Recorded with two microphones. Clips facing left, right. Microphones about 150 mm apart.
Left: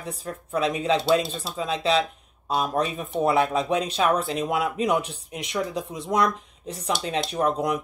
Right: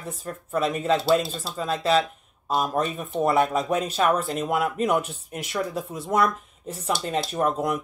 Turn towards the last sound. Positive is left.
turn(degrees=0)  # may be behind; listen again after turning